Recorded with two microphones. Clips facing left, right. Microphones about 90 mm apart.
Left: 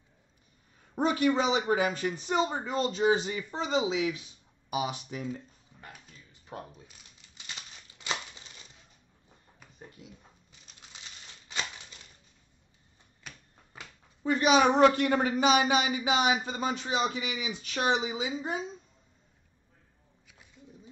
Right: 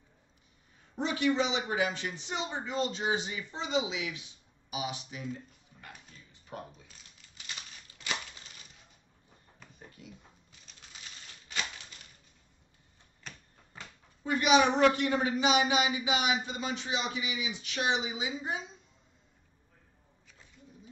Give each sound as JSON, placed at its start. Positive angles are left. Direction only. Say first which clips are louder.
{"t": 0.9, "sound": "a man's voice", "louder": "left 3 dB", "side_deg": 45}
{"t": 6.5, "sound": "speech", "louder": "left 1 dB", "side_deg": 30}
{"t": 10.9, "sound": "a sound", "louder": "left 1 dB", "side_deg": 20}
{"t": 14.2, "sound": "a man's voice", "louder": "left 2 dB", "side_deg": 35}